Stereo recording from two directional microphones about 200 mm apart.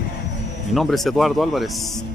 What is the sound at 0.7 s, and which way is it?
Speech, centre (ahead or behind).